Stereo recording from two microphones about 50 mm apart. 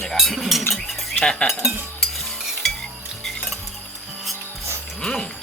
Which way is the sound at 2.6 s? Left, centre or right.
Centre.